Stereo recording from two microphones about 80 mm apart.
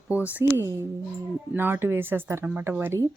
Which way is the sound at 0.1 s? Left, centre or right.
Centre.